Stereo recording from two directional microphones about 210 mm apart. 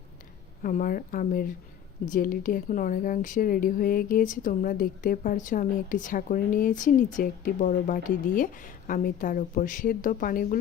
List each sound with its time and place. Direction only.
0.6 s speech: 40° left (ahead or behind)